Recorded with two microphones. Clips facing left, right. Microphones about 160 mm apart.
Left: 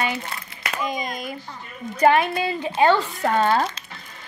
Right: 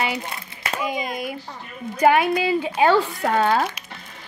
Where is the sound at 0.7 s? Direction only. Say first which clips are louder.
Right 1 dB; 10° right (ahead or behind).